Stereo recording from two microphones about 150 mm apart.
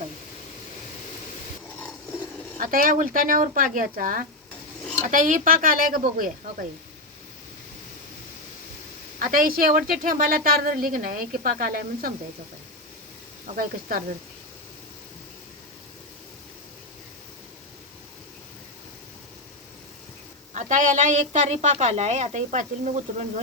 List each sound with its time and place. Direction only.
2.6 s a woman's voice: 65° right (ahead or behind)
9.1 s a woman's voice: 65° right (ahead or behind)
13.6 s speech: 65° right (ahead or behind)
20.5 s a woman's voice: 55° right (ahead or behind)